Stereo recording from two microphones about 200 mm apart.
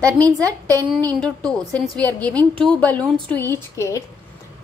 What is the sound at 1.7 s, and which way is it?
A woman's voice, 5° left (ahead or behind).